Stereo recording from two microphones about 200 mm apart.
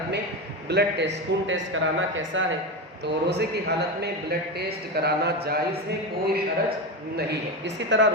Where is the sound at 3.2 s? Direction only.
55° right (ahead or behind).